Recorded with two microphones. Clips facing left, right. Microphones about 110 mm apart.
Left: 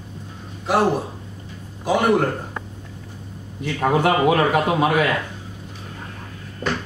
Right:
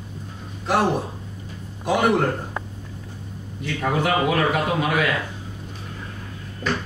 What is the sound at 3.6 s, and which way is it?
Speech, 45° left (ahead or behind).